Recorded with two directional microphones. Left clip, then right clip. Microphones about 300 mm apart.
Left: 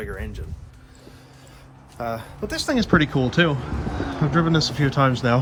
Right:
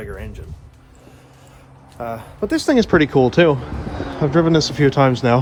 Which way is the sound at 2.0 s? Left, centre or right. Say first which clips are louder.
Right 1 dB; centre.